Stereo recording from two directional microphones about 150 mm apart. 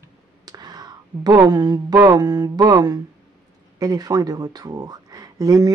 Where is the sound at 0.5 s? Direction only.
25° right (ahead or behind).